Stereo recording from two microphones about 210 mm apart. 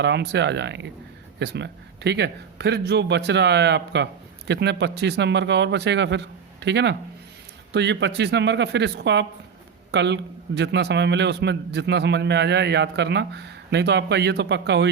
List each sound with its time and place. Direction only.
0.0 s a man's voice: 55° right (ahead or behind)